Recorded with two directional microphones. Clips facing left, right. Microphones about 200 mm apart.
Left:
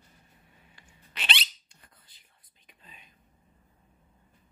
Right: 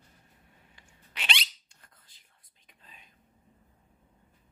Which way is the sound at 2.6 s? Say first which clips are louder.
Left 2 dB; 5° left (ahead or behind).